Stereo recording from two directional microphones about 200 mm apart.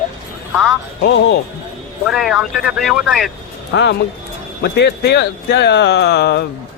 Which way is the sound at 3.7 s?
60° left (ahead or behind).